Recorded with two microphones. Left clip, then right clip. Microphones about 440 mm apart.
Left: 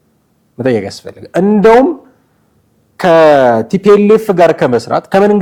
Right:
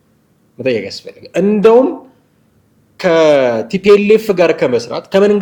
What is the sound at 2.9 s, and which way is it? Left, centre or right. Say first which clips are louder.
Speech: left 4 dB; left.